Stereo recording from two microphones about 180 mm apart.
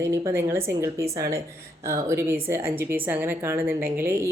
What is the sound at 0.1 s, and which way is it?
A woman's voice, 15° right (ahead or behind).